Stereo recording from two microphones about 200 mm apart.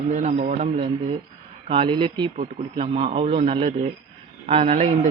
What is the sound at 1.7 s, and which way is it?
A man's voice, 25° right (ahead or behind).